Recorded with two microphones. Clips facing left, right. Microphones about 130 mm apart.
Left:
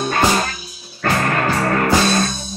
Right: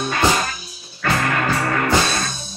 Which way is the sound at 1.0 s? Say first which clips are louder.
Left 2 dB; 40° left (ahead or behind).